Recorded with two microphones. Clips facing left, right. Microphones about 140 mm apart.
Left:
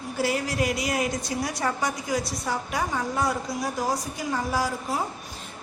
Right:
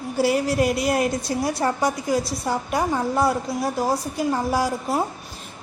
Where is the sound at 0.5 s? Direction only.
60° right (ahead or behind).